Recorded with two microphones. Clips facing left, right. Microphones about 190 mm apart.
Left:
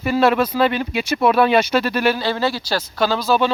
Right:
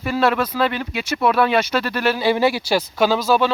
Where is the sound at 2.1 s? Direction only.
10° right (ahead or behind).